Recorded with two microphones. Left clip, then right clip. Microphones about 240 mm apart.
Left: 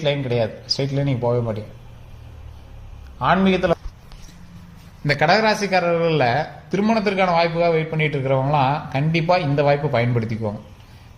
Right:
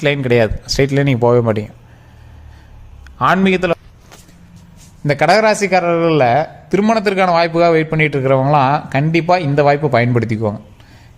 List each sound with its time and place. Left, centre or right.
0.0 s speech: right
3.2 s speech: right
5.0 s speech: right